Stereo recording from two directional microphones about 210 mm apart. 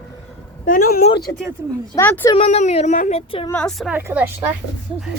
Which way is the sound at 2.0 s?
10° left (ahead or behind).